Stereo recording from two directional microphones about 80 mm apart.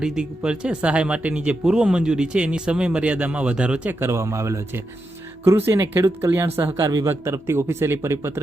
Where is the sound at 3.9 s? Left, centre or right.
Right.